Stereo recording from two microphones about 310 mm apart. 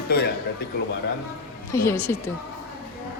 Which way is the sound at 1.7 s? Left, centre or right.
Centre.